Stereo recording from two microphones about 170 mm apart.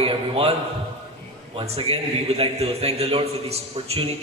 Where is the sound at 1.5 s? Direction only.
35° right (ahead or behind).